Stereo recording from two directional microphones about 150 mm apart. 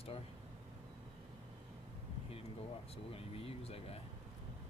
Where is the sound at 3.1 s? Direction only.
40° left (ahead or behind).